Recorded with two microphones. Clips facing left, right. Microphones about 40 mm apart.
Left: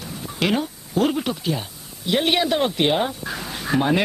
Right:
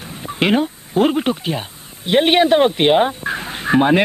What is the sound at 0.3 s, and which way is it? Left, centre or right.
Speech, right.